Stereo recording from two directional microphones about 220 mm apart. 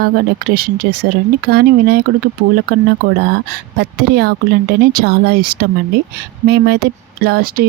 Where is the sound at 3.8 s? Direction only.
45° right (ahead or behind).